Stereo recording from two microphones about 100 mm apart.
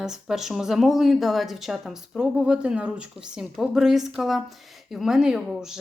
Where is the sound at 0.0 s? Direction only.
5° right (ahead or behind).